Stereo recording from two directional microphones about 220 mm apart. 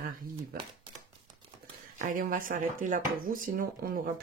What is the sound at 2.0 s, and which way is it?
Speech, 35° right (ahead or behind).